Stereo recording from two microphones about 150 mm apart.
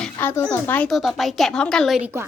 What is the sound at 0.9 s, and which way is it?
A woman's voice, centre (ahead or behind).